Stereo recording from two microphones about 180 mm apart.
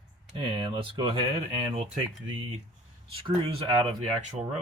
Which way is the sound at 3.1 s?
30° right (ahead or behind).